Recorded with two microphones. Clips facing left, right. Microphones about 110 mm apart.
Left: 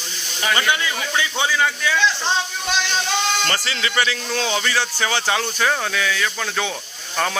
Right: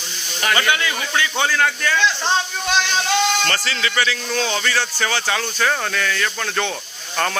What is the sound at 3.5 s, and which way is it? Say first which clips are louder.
Speech: right 1 dB; 25° left (ahead or behind).